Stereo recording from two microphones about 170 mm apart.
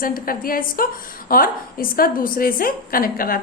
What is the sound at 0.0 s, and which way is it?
A woman's voice, 55° left (ahead or behind).